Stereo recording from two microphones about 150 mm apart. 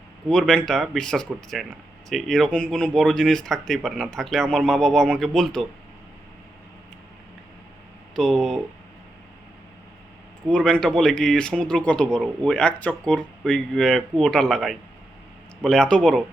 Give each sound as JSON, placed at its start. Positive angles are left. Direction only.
{"t": 0.3, "sound": "speech", "side_deg": 5}
{"t": 8.1, "sound": "speech", "side_deg": 0}
{"t": 10.5, "sound": "speech", "side_deg": 5}